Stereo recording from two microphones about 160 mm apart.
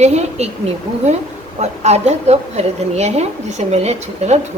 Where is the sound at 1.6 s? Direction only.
45° right (ahead or behind).